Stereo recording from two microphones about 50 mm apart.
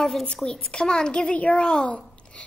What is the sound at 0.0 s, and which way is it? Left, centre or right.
A child's voice, centre.